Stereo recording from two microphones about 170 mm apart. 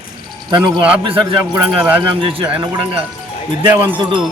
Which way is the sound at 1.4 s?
15° right (ahead or behind).